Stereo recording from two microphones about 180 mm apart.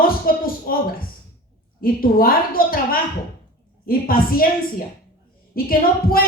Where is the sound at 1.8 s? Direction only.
55° left (ahead or behind).